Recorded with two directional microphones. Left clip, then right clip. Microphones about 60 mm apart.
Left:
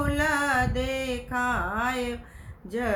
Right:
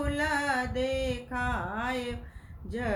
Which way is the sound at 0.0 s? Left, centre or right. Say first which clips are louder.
Left 4 dB; left.